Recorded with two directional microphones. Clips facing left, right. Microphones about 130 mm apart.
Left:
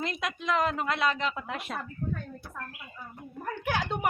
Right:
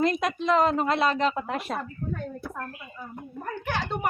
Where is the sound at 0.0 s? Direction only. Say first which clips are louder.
Right 8 dB; 40° right (ahead or behind).